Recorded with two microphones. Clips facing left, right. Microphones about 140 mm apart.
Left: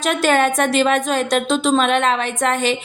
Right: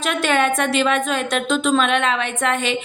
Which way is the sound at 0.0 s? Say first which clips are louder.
Left 3 dB; 40° left (ahead or behind).